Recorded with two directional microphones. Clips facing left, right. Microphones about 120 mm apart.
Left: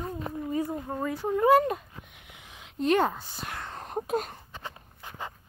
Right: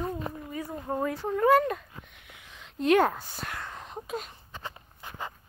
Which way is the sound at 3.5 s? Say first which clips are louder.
Left 1 dB; 25° left (ahead or behind).